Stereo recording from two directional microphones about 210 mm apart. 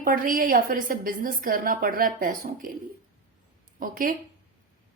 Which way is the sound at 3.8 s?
40° right (ahead or behind).